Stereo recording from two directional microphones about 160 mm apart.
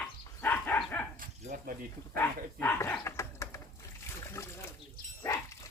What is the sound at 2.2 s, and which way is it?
Dog, 15° left (ahead or behind).